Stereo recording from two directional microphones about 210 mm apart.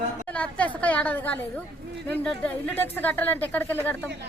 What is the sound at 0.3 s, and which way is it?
A woman's voice, 5° left (ahead or behind).